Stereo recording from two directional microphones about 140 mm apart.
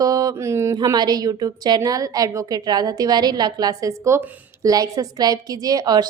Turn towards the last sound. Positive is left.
turn(degrees=-30)  # may be behind; listen again after turning